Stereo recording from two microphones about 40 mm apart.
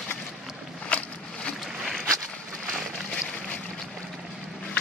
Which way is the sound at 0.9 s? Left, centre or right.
Left.